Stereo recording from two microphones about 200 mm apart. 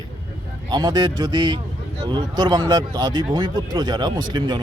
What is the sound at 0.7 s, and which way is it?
Speech, 20° right (ahead or behind).